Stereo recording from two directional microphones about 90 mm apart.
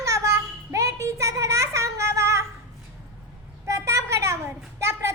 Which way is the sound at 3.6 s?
30° right (ahead or behind).